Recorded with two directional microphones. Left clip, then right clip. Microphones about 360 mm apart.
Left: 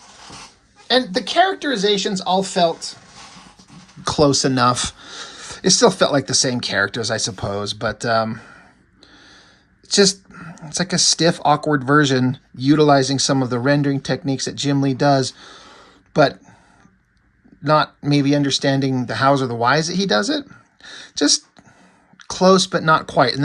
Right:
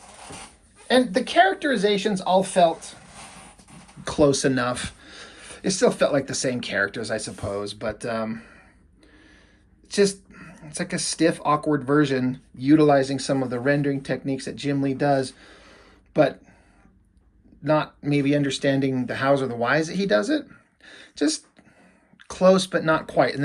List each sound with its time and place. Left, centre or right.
0.9 s speech: centre
4.0 s speech: centre
9.9 s speech: centre
17.7 s speech: centre
20.8 s a sound: centre
22.3 s speech: centre